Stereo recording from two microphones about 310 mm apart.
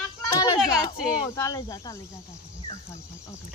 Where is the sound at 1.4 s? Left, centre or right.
Centre.